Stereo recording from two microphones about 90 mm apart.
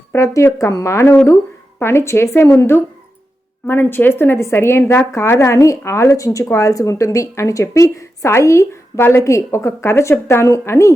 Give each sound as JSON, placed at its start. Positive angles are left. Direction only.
{"t": 0.1, "sound": "a woman's voice", "side_deg": 30}